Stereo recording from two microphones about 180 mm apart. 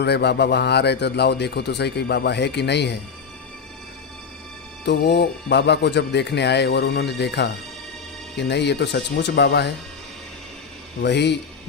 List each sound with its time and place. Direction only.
0.0 s a man's voice: 65° left (ahead or behind)
4.9 s a man's voice: 70° left (ahead or behind)
11.0 s a man's voice: 70° left (ahead or behind)